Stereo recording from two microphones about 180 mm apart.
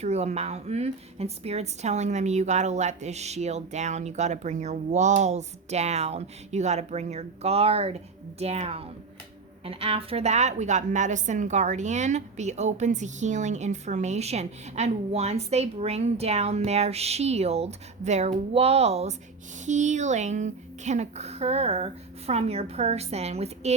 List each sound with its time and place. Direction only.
0.0 s a woman's voice: 35° right (ahead or behind)